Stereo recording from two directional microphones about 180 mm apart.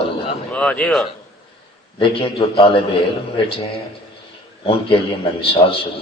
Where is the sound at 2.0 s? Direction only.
30° left (ahead or behind).